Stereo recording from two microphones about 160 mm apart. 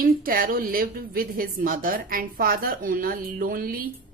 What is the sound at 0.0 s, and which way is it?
A woman's voice, 65° right (ahead or behind).